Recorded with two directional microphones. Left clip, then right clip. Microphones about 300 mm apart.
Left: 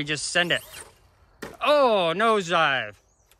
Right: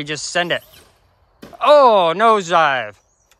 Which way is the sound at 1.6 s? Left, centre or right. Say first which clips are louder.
Right 9 dB; centre.